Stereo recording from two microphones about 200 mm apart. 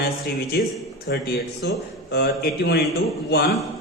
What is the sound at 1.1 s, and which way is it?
A man's voice, 55° left (ahead or behind).